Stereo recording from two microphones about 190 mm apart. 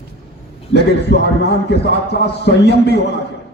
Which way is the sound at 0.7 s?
60° left (ahead or behind).